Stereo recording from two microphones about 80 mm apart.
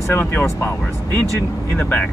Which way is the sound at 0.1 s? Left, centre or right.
Left.